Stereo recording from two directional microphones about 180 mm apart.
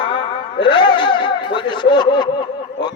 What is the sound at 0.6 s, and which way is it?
Music, 25° left (ahead or behind).